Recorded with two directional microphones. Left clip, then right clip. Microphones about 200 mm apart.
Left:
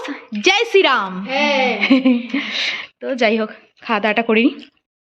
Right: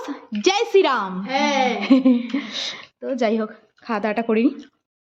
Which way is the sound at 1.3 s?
15° right (ahead or behind).